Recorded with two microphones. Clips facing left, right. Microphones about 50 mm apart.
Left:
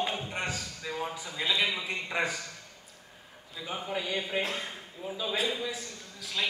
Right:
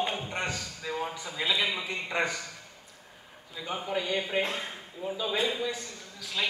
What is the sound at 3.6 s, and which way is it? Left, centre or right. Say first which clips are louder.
A man's voice: right 2 dB; centre.